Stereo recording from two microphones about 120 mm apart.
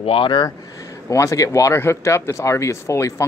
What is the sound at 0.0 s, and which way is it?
Speech, 50° left (ahead or behind).